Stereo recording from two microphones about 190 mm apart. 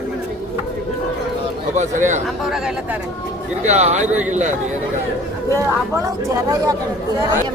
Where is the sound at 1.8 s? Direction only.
40° right (ahead or behind).